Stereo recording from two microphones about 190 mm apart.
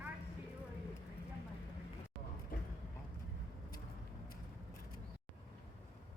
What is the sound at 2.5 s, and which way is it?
Clip-clop, 50° left (ahead or behind).